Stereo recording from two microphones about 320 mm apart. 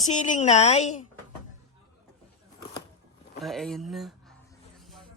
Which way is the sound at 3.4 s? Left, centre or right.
Centre.